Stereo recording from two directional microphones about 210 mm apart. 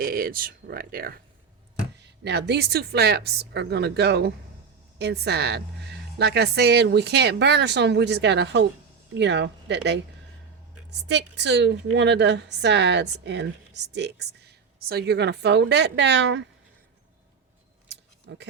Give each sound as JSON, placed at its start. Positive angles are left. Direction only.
{"t": 0.0, "sound": "a woman's voice", "side_deg": -45}
{"t": 17.8, "sound": "scissors", "side_deg": -55}